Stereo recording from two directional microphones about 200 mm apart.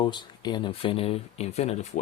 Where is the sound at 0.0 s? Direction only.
20° left (ahead or behind).